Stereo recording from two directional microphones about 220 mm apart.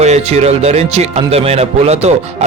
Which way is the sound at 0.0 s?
30° right (ahead or behind).